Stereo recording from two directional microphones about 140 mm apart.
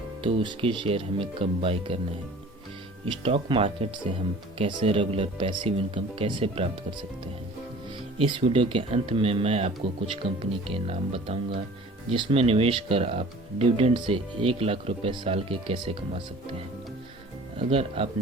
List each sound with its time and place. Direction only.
0.2 s speech: 40° right (ahead or behind)
3.2 s speech: 40° right (ahead or behind)
8.2 s speech: 40° right (ahead or behind)
17.6 s speech: 45° right (ahead or behind)